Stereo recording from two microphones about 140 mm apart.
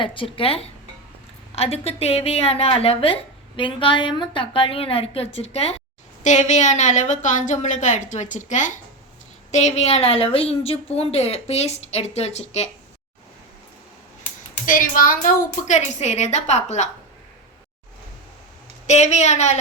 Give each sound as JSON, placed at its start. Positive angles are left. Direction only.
{"t": 0.0, "sound": "a woman's voice", "side_deg": 40}
{"t": 9.5, "sound": "a woman's voice", "side_deg": 55}
{"t": 14.7, "sound": "a woman's voice", "side_deg": 80}
{"t": 18.9, "sound": "a woman's voice", "side_deg": 55}